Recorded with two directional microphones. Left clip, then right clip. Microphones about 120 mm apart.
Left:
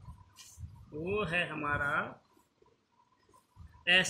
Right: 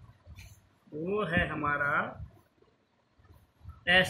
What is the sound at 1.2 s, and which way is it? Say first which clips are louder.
Speech: right 3 dB; 55° left (ahead or behind).